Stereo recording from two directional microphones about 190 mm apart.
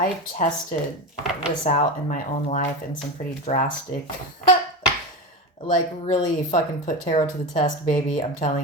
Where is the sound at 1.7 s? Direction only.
40° left (ahead or behind).